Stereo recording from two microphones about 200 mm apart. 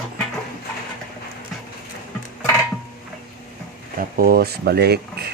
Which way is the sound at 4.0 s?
50° right (ahead or behind).